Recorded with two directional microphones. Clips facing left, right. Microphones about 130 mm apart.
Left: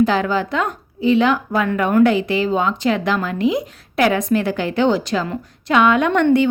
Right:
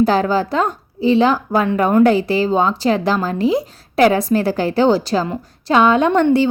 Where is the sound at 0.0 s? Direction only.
35° right (ahead or behind).